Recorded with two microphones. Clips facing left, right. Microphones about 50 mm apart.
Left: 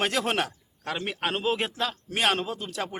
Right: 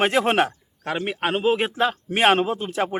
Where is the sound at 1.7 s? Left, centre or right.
Right.